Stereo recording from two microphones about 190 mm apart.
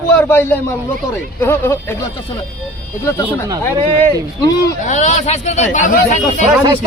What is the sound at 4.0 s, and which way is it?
Speech, 15° left (ahead or behind).